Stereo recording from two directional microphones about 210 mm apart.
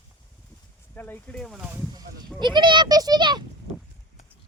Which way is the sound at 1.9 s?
20° right (ahead or behind).